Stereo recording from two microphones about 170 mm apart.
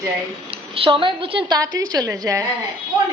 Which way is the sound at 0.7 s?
30° right (ahead or behind).